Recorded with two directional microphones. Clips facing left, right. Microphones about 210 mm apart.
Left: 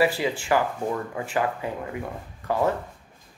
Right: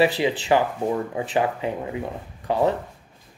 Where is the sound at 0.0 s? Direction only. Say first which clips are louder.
Right 3 dB; 20° right (ahead or behind).